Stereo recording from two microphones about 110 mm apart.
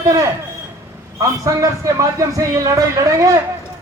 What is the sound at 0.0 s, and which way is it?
A man's voice, 30° right (ahead or behind).